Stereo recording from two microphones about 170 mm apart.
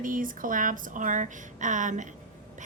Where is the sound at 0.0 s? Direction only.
50° right (ahead or behind).